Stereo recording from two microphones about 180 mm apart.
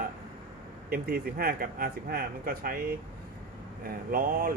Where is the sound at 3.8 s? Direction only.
50° right (ahead or behind).